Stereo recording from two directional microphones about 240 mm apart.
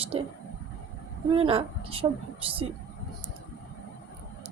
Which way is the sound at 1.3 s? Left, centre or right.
Right.